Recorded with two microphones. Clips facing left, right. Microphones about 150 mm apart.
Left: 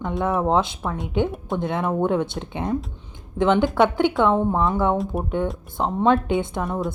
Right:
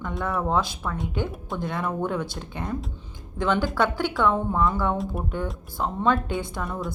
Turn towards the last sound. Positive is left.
turn(degrees=20)  # may be behind; listen again after turning